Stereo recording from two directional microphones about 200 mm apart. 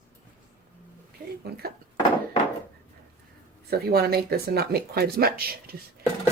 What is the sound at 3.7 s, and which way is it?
Speech, 50° right (ahead or behind).